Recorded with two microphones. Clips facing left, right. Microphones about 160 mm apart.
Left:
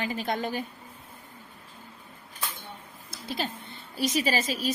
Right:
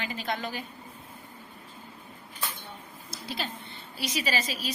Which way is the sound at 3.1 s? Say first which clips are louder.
Left 3 dB; 45° left (ahead or behind).